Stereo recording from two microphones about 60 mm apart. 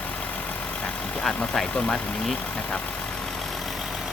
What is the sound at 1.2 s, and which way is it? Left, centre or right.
Speech, centre.